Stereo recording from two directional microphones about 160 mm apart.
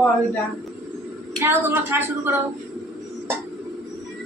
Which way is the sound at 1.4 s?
15° right (ahead or behind).